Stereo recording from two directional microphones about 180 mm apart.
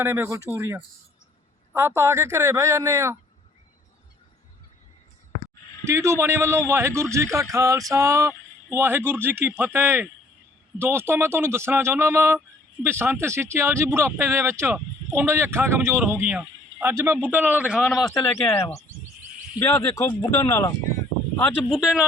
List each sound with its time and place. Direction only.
0.0 s speech: 15° right (ahead or behind)
5.8 s speech: 15° right (ahead or behind); by 18.1 s centre (ahead or behind)
18.1 s speech: 15° left (ahead or behind)
18.7 s a sound: 35° left (ahead or behind)
19.5 s speech: 15° left (ahead or behind); by 22.0 s centre (ahead or behind)